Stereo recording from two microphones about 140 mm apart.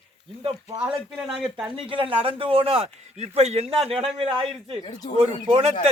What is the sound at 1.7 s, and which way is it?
A man's voice, 40° right (ahead or behind).